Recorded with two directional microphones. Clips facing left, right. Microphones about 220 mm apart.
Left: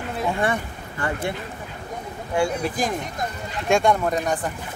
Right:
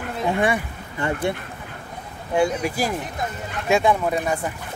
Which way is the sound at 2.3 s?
20° right (ahead or behind).